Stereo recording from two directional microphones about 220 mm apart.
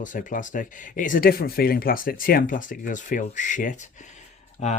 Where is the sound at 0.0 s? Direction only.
35° left (ahead or behind).